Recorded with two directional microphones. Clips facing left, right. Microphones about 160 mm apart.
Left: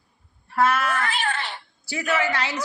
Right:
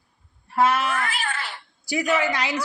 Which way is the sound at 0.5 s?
15° right (ahead or behind).